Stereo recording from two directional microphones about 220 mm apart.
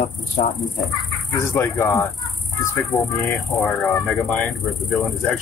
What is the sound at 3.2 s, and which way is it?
Speech, 10° left (ahead or behind).